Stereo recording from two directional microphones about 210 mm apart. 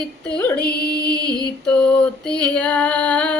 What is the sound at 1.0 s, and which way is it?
Mantra, 20° right (ahead or behind).